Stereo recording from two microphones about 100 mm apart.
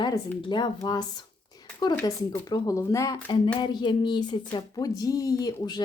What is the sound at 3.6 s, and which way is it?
Speech, 50° left (ahead or behind).